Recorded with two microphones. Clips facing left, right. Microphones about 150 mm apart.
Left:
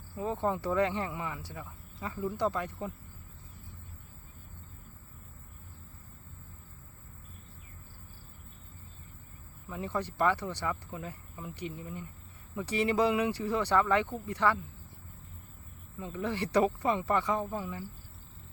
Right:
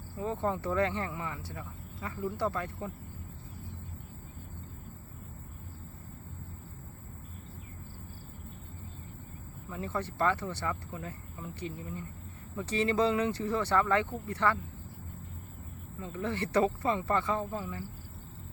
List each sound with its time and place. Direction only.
0.2 s speech: 15° left (ahead or behind)
9.6 s speech: 15° left (ahead or behind)
16.0 s speech: 15° left (ahead or behind)